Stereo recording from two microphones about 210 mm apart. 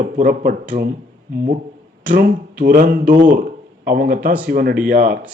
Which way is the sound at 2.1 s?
40° right (ahead or behind).